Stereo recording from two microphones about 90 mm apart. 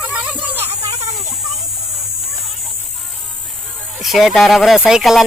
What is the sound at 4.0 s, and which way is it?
Speech, centre (ahead or behind).